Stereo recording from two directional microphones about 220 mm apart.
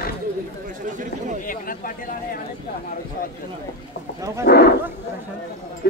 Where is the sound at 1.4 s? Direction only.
40° left (ahead or behind).